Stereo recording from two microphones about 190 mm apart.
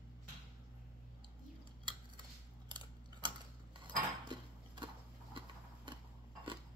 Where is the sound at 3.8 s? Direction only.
25° right (ahead or behind).